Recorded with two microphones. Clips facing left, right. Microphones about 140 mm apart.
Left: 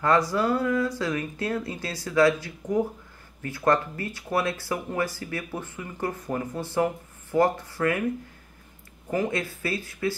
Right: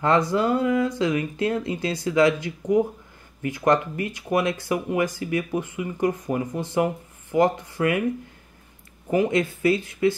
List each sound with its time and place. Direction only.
0.0 s speech: 20° right (ahead or behind)
9.1 s speech: 20° right (ahead or behind)